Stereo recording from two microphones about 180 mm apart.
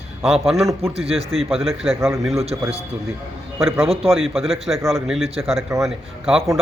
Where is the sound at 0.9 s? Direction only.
35° right (ahead or behind).